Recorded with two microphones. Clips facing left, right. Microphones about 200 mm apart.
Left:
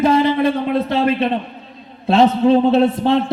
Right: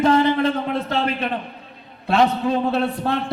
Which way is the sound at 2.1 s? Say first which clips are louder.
Left 6 dB; 25° left (ahead or behind).